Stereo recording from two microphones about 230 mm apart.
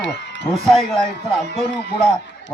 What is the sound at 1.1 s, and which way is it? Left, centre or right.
Speech, left.